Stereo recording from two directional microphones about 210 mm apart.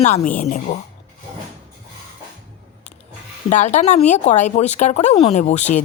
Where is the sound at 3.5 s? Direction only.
35° left (ahead or behind).